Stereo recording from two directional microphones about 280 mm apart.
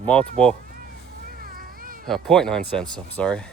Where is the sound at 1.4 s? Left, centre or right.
Right.